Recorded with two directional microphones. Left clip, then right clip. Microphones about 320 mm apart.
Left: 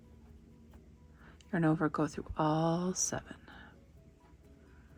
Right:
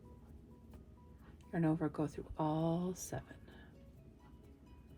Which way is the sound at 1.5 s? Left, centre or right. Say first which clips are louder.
Left 6 dB; left.